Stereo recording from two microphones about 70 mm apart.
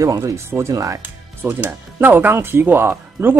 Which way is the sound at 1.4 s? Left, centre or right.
Right.